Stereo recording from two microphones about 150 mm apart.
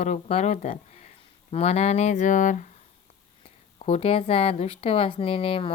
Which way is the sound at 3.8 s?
45° left (ahead or behind).